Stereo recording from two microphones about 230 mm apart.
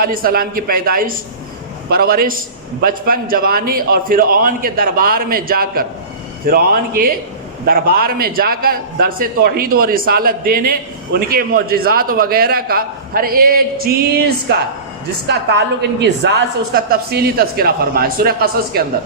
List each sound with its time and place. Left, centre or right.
0.0 s a man's voice: right